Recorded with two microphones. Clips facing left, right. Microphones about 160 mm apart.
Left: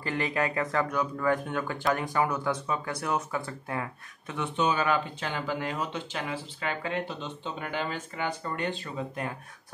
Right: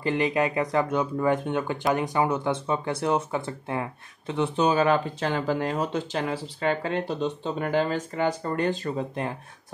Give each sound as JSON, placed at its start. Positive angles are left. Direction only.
{"t": 0.0, "sound": "speech", "side_deg": -20}